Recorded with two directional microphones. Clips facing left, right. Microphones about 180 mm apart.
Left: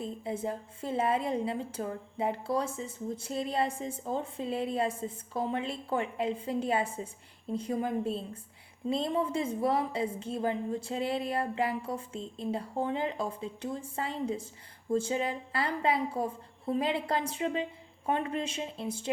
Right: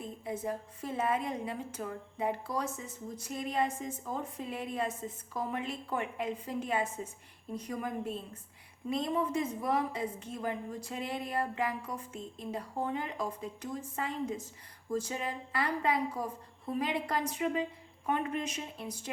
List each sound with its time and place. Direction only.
0.0 s a woman's voice: 30° left (ahead or behind)